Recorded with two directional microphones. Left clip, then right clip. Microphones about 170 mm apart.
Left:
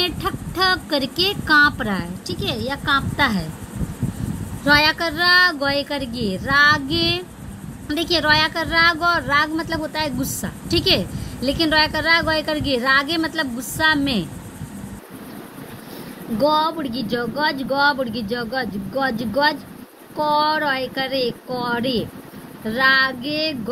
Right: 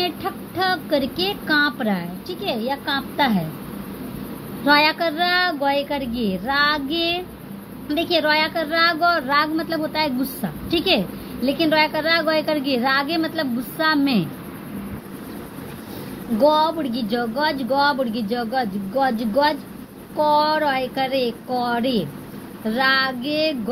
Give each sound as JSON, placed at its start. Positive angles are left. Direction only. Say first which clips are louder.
{"t": 0.0, "sound": "speech", "louder": "left 2 dB", "side_deg": 35}
{"t": 4.6, "sound": "speech", "louder": "even", "side_deg": 25}
{"t": 16.4, "sound": "speech", "louder": "right 1 dB", "side_deg": 35}